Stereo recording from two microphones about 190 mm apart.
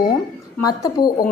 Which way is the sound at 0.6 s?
20° left (ahead or behind).